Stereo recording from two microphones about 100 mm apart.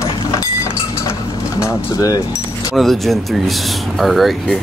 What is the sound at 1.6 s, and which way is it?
Speech, 35° left (ahead or behind).